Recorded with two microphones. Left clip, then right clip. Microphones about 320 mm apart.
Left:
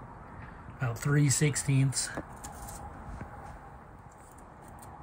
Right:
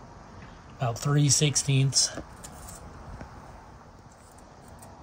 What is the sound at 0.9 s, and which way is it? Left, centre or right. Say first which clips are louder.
Speech: right 4 dB; right.